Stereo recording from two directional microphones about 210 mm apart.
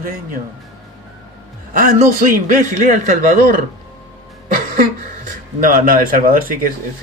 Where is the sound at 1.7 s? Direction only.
40° right (ahead or behind).